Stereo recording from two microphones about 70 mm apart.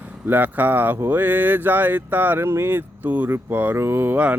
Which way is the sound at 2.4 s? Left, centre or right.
Right.